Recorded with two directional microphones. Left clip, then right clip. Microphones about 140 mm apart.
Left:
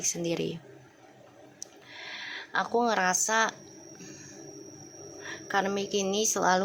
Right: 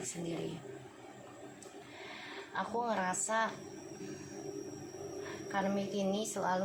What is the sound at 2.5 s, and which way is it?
Speech, 90° left.